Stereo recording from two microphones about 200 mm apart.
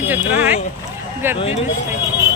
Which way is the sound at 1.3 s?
30° left (ahead or behind).